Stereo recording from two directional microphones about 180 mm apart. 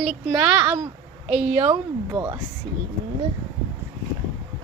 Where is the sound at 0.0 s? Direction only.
5° right (ahead or behind).